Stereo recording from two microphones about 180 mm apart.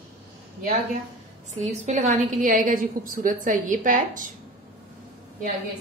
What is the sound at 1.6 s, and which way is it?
A woman's voice, 40° right (ahead or behind).